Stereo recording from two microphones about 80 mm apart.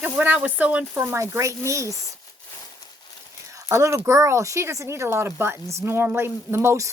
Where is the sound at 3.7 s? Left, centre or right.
Right.